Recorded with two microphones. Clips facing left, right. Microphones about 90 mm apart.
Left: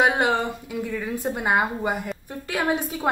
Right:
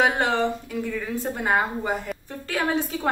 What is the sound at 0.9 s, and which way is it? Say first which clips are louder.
A woman's voice: left 1 dB; 10° left (ahead or behind).